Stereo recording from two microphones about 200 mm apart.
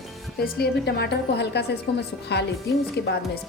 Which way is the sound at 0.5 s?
55° left (ahead or behind).